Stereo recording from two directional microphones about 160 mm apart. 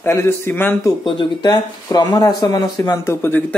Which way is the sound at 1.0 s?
30° left (ahead or behind).